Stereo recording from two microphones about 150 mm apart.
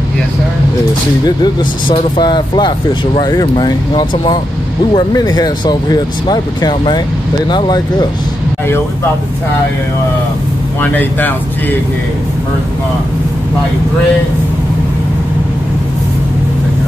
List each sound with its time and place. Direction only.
1.2 s speech: 30° left (ahead or behind)
10.8 s speech: 10° left (ahead or behind)